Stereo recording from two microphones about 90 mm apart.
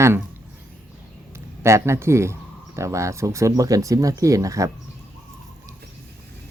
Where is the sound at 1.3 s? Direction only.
30° right (ahead or behind).